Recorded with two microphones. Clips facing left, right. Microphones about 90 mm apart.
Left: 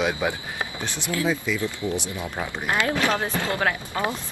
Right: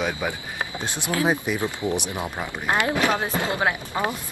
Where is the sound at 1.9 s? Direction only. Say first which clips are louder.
Right 2 dB; 20° right (ahead or behind).